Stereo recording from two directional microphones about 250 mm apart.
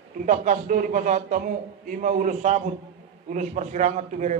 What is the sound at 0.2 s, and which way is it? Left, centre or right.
A man's voice, right.